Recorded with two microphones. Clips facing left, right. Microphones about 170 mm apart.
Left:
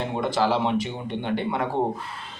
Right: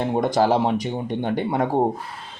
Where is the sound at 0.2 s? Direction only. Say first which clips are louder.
Right 4 dB; 45° right (ahead or behind).